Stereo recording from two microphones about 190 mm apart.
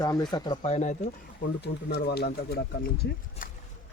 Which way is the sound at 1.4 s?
60° left (ahead or behind).